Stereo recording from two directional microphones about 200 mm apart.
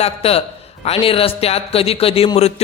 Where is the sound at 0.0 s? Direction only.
30° left (ahead or behind).